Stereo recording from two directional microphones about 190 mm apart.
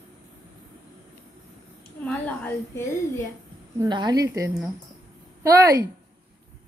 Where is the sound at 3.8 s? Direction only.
20° right (ahead or behind).